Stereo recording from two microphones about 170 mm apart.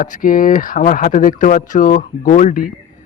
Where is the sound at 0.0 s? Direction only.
55° left (ahead or behind).